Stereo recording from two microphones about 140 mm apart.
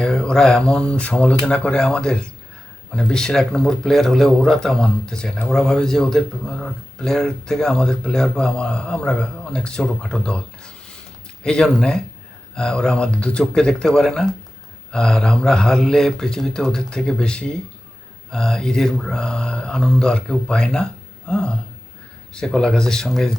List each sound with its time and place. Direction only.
0.0 s speech: 5° left (ahead or behind)